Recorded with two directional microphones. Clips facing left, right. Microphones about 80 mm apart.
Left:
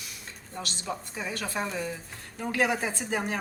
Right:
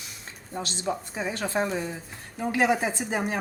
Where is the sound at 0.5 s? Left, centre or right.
Right.